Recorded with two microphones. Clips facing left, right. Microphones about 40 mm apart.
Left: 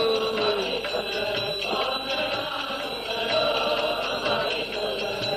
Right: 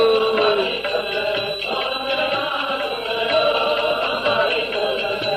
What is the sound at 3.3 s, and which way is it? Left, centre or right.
Music, right.